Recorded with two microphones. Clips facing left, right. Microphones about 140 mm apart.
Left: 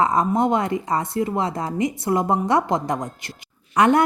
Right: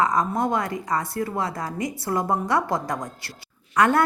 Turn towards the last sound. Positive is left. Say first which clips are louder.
# left 3 dB
turn(degrees=20)  # may be behind; listen again after turning